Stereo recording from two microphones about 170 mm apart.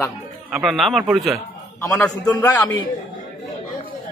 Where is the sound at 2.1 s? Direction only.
20° left (ahead or behind).